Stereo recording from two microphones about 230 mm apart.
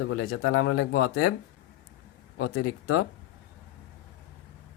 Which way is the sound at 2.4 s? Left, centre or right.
Left.